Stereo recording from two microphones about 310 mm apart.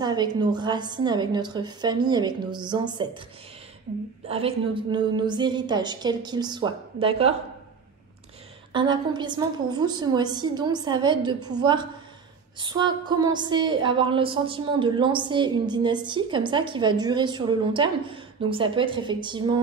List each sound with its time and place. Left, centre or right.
0.0 s a woman's voice: centre
4.3 s a woman's voice: centre
8.7 s a woman's voice: centre